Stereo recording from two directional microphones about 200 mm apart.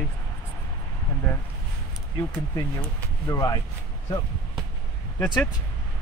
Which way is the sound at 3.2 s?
20° left (ahead or behind).